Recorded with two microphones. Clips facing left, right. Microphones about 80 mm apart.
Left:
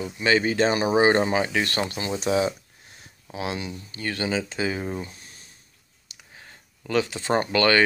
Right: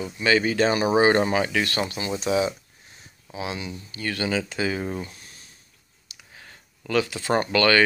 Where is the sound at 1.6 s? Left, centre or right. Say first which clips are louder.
Even; left.